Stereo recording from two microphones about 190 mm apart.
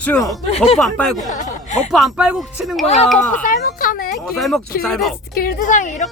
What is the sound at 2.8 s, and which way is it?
Speech, 30° left (ahead or behind).